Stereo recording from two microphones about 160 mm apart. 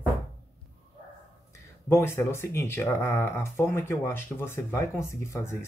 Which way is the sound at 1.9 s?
15° left (ahead or behind).